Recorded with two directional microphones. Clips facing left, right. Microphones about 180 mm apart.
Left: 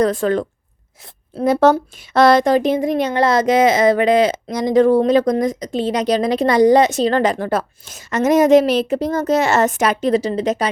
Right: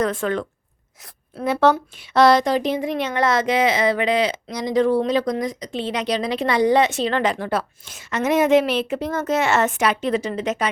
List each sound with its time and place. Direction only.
0.0 s a woman's voice: 35° left (ahead or behind)
1.5 s speech: 40° left (ahead or behind)